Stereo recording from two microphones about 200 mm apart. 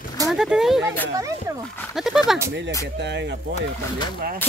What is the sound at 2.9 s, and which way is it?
Speech, 60° right (ahead or behind).